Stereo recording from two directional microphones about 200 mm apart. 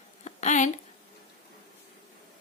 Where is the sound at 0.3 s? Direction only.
35° left (ahead or behind).